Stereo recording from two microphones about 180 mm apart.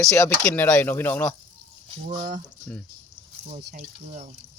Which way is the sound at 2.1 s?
40° right (ahead or behind).